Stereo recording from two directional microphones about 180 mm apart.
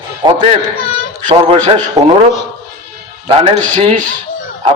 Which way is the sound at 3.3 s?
30° right (ahead or behind).